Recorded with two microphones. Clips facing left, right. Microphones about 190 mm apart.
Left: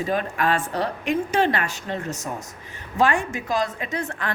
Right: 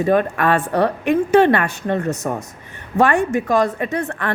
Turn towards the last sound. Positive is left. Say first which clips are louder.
# right 6 dB
turn(degrees=-60)  # may be behind; listen again after turning